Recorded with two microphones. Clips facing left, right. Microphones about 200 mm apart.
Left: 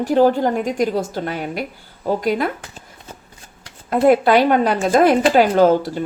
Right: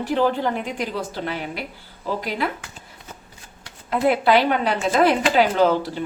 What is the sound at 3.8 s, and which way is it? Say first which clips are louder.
A woman's voice: left 5 dB; 45° left (ahead or behind).